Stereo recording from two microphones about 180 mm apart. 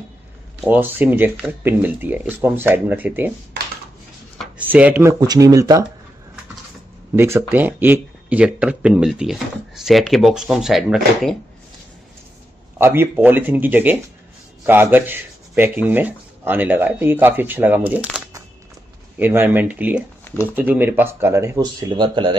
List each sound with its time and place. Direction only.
0.7 s speech: 10° right (ahead or behind)
4.6 s speech: 10° right (ahead or behind)
5.2 s speech: 20° right (ahead or behind)
7.2 s speech: 15° right (ahead or behind)
12.7 s speech: 10° right (ahead or behind)
19.1 s speech: 10° right (ahead or behind); by 22.4 s 25° right (ahead or behind)